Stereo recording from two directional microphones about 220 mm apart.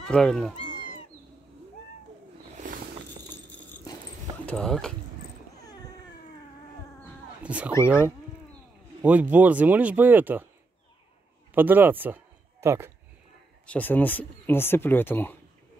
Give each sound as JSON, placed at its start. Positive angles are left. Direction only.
{"t": 0.0, "sound": "speech", "side_deg": 5}
{"t": 2.5, "sound": "a sound", "side_deg": -35}
{"t": 4.5, "sound": "speech", "side_deg": 5}
{"t": 7.4, "sound": "speech", "side_deg": -5}
{"t": 11.5, "sound": "speech", "side_deg": -10}
{"t": 13.7, "sound": "speech", "side_deg": 10}